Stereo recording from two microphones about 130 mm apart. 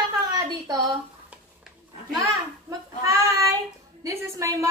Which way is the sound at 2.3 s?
25° right (ahead or behind).